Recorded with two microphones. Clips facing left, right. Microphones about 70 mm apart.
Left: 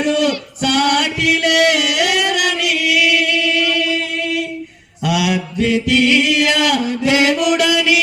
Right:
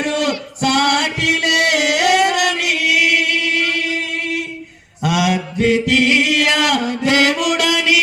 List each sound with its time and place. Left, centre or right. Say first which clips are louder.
0.0 s music: left 3 dB; right
5.0 s chant: even; right